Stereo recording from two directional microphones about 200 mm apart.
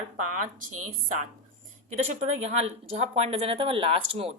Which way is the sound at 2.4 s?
30° right (ahead or behind).